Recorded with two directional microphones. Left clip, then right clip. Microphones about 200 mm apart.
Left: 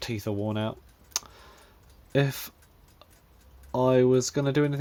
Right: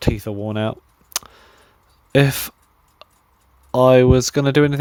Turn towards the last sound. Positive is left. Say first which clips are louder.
# right 10 dB
turn(degrees=-50)  # may be behind; listen again after turning